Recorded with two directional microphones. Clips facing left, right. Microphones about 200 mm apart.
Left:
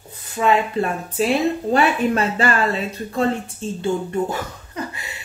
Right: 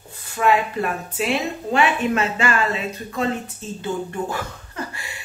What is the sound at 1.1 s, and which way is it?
A woman's voice, 35° left (ahead or behind).